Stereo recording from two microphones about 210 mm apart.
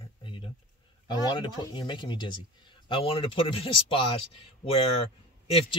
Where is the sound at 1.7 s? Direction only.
20° left (ahead or behind).